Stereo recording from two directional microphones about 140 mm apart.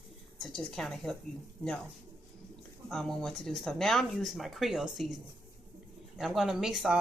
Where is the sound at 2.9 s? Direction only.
5° left (ahead or behind).